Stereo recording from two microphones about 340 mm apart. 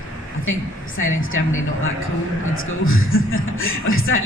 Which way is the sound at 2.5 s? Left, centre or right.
Left.